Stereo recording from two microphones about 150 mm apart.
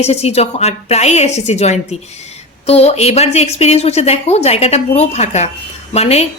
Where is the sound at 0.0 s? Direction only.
45° left (ahead or behind).